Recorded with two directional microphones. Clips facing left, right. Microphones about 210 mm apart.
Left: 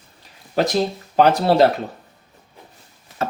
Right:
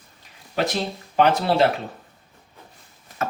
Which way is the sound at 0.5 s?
40° left (ahead or behind).